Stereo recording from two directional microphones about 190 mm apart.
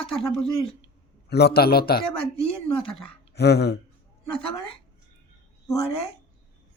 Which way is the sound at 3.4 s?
60° left (ahead or behind).